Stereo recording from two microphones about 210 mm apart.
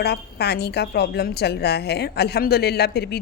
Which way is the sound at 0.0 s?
50° left (ahead or behind).